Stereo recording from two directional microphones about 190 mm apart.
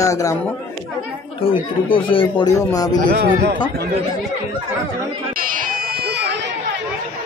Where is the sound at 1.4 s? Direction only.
25° left (ahead or behind).